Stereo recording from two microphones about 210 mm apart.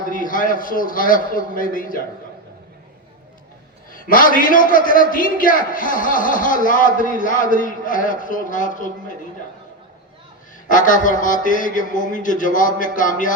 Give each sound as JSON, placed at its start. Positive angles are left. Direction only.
{"t": 0.0, "sound": "a man's voice", "side_deg": 40}
{"t": 3.9, "sound": "a man's voice", "side_deg": 40}
{"t": 10.7, "sound": "a man's voice", "side_deg": 40}